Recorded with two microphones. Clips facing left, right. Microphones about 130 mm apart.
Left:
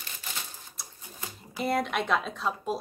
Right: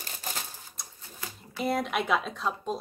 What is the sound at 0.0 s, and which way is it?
Typewriter, 40° right (ahead or behind).